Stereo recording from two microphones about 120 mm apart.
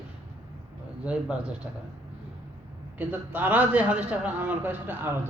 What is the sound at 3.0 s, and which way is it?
Speech, 15° right (ahead or behind).